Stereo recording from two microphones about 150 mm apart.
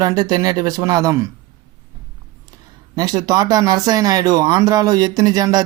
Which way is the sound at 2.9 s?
25° right (ahead or behind).